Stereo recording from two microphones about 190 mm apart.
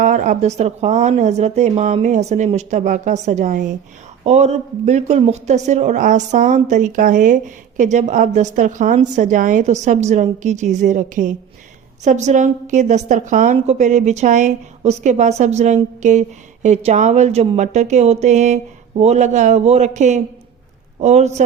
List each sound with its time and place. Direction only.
0.0 s a woman's voice: 40° right (ahead or behind)